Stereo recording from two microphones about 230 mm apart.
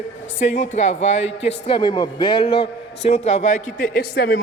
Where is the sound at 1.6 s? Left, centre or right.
Left.